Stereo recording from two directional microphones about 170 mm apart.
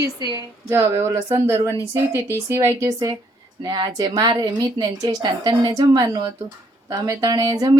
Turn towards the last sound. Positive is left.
turn(degrees=-25)  # may be behind; listen again after turning